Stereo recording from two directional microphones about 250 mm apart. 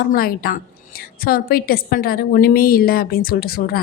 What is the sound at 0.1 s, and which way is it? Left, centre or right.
A woman's voice, left.